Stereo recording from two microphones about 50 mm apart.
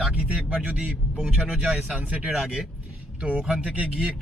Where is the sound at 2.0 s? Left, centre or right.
Right.